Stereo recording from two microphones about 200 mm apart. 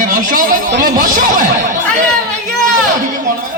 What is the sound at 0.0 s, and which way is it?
Speech, 45° right (ahead or behind).